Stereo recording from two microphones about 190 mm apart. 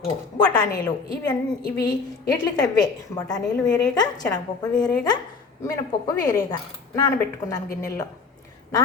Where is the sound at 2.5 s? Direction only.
20° left (ahead or behind).